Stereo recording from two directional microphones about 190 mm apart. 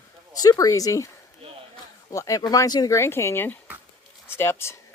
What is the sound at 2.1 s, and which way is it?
Speech, 15° left (ahead or behind).